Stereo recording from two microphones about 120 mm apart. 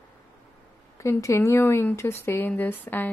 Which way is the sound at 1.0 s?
25° left (ahead or behind).